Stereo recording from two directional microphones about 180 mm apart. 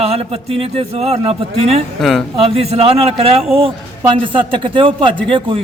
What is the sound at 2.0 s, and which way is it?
Speech, centre (ahead or behind).